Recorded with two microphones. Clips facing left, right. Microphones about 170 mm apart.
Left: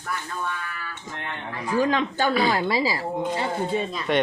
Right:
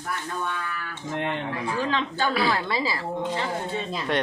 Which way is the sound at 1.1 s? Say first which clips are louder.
Right 9 dB; 90° right.